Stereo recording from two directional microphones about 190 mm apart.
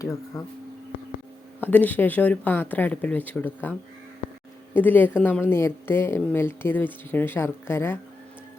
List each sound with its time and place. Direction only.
0.0 s speech: 15° left (ahead or behind)
1.6 s speech: 10° left (ahead or behind)